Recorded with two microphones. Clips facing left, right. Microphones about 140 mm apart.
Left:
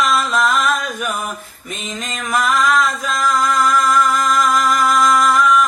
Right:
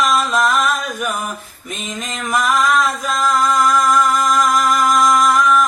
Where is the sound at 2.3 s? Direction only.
10° right (ahead or behind).